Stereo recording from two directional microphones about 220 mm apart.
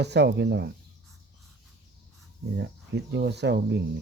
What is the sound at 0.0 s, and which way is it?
Speech, 50° right (ahead or behind).